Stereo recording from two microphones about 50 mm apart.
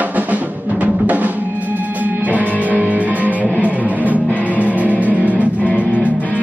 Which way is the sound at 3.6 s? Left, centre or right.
Right.